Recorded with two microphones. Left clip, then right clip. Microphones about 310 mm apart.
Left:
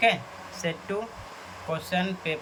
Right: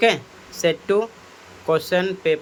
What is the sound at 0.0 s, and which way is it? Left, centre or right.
Speech, centre.